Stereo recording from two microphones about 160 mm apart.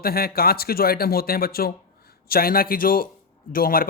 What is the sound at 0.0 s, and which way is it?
Speech, 70° left (ahead or behind).